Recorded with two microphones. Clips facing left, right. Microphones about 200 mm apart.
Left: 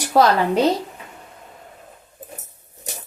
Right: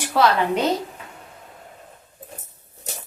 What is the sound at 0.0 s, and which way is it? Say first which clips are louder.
Speech: left 3 dB; 40° left (ahead or behind).